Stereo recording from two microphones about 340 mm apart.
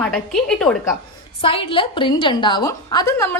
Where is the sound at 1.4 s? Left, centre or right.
Centre.